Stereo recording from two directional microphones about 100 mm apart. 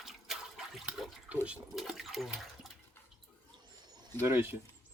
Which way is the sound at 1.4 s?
5° right (ahead or behind).